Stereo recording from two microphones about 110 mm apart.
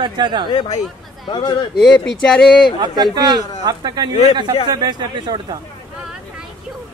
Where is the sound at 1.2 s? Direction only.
45° left (ahead or behind).